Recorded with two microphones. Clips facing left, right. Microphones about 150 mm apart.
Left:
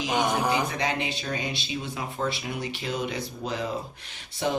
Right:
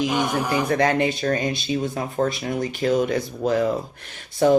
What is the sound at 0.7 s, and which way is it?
Speech, 50° right (ahead or behind).